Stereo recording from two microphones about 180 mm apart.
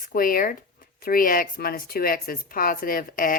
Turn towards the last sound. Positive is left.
turn(degrees=50)  # may be behind; listen again after turning